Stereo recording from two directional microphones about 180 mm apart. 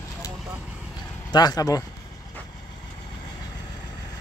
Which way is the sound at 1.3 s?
20° left (ahead or behind).